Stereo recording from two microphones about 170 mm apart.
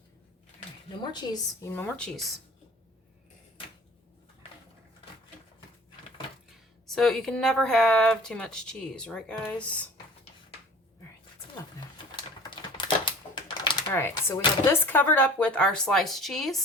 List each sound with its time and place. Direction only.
1.0 s a woman's voice: 25° left (ahead or behind)
1.7 s speech: 10° left (ahead or behind)
6.9 s speech: 5° left (ahead or behind)
12.1 s typing: 25° left (ahead or behind)
14.3 s speech: 15° left (ahead or behind)